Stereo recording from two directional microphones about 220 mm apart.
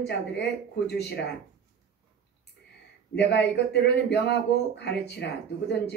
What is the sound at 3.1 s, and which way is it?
Speech, 50° left (ahead or behind).